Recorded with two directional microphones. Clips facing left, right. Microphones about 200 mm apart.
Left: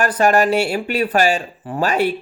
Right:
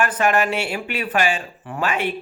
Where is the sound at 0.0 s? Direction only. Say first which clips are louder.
Left 4 dB; 40° left (ahead or behind).